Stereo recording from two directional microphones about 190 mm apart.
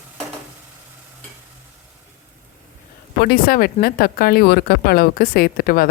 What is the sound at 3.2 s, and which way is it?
Speech, 55° left (ahead or behind).